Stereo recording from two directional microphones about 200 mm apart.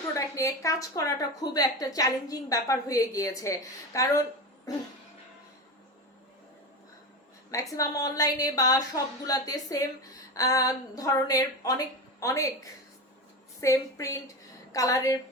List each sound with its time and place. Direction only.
0.1 s a woman's voice: 15° left (ahead or behind)
7.5 s a woman's voice: 15° left (ahead or behind)